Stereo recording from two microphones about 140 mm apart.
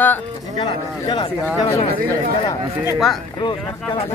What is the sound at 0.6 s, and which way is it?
Speech, 35° left (ahead or behind).